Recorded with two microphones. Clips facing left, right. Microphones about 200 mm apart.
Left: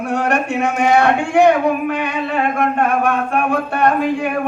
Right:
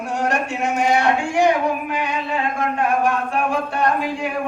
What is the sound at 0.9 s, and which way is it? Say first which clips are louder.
A man's voice: left 7 dB; 60° left (ahead or behind).